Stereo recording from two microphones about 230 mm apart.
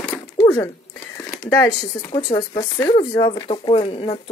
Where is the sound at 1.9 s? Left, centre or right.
Centre.